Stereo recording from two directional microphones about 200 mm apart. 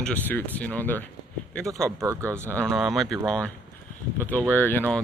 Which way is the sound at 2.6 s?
Centre (ahead or behind).